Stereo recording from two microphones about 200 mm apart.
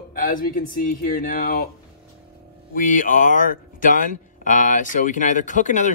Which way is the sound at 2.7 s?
40° left (ahead or behind).